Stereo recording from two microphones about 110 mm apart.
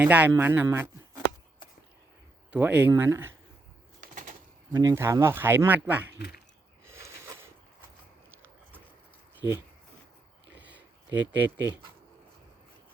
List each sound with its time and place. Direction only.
0.0 s speech: 15° right (ahead or behind)
2.5 s speech: 15° right (ahead or behind)
4.7 s speech: 35° right (ahead or behind)
4.9 s speech: 25° right (ahead or behind)
6.8 s a sound: 25° right (ahead or behind)
10.6 s a sound: 15° right (ahead or behind)